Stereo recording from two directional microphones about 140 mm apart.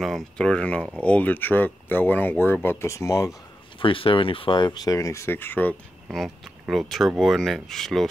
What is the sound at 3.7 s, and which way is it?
Speech, 40° left (ahead or behind).